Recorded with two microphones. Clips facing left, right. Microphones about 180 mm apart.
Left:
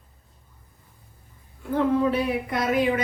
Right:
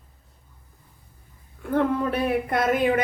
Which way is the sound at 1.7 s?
55° right (ahead or behind).